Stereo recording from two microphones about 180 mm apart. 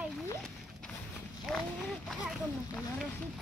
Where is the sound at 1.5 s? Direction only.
Centre (ahead or behind).